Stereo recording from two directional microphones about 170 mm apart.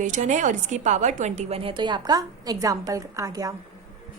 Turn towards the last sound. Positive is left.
turn(degrees=-20)  # may be behind; listen again after turning